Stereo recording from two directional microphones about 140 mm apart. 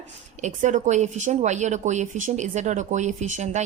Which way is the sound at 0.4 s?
60° right (ahead or behind).